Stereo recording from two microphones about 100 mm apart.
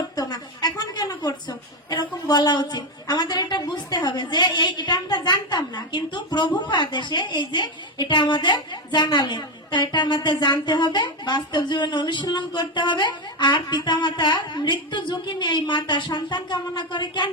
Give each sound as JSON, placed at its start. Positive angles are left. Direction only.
{"t": 0.2, "sound": "a woman's voice", "side_deg": 45}